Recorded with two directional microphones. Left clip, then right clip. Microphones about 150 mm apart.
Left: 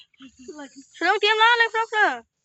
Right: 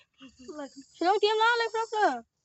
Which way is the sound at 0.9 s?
20° right (ahead or behind).